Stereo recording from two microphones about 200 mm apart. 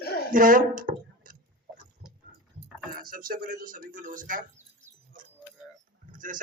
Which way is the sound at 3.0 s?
45° right (ahead or behind).